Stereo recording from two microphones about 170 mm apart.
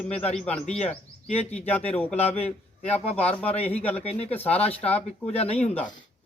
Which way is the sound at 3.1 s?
10° left (ahead or behind).